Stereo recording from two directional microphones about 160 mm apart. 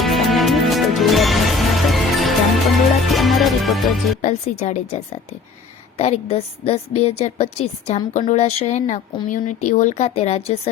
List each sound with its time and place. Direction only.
0.0 s music: centre (ahead or behind)
4.2 s a woman's voice: 45° left (ahead or behind)